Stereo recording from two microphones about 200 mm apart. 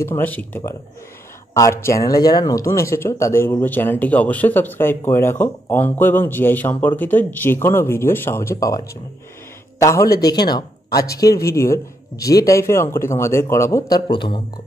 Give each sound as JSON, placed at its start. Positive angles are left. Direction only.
{"t": 0.0, "sound": "speech", "side_deg": 10}